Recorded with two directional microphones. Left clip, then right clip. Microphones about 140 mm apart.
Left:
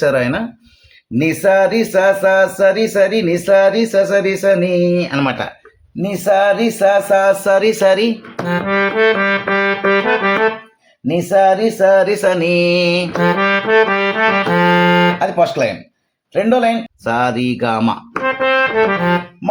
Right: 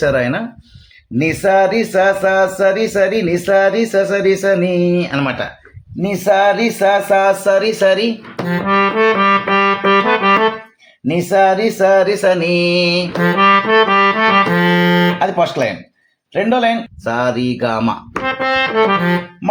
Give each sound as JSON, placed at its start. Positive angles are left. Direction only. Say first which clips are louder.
{"t": 0.0, "sound": "a sound", "louder": "even", "side_deg": 25}
{"t": 1.2, "sound": "speech", "louder": "even", "side_deg": 20}
{"t": 5.2, "sound": "speech", "louder": "left 1 dB", "side_deg": 30}
{"t": 6.0, "sound": "speech", "louder": "right 1 dB", "side_deg": 20}
{"t": 7.3, "sound": "speech", "louder": "left 1 dB", "side_deg": 30}
{"t": 8.4, "sound": "accordion", "louder": "right 2 dB", "side_deg": -10}
{"t": 11.1, "sound": "a sound", "louder": "even", "side_deg": 10}
{"t": 13.1, "sound": "music", "louder": "right 6 dB", "side_deg": -10}
{"t": 15.2, "sound": "a sound", "louder": "left 1 dB", "side_deg": 20}
{"t": 18.1, "sound": "music", "louder": "left 3 dB", "side_deg": -15}